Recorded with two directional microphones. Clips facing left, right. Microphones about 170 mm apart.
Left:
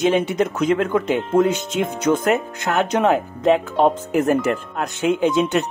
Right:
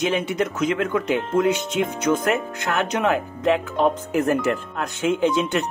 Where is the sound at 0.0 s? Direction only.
25° left (ahead or behind).